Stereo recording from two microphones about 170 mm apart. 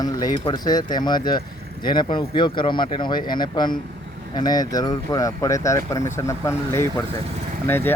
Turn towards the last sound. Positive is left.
turn(degrees=10)  # may be behind; listen again after turning